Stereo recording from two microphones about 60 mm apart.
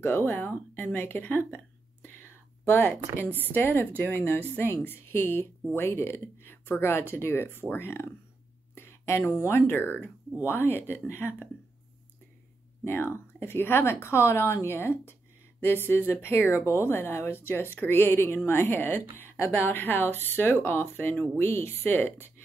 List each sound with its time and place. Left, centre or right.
0.0 s speech: left
1.4 s a sound: left
2.6 s speech: left
12.8 s speech: left